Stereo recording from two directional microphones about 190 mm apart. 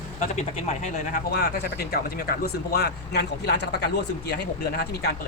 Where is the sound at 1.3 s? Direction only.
60° left (ahead or behind).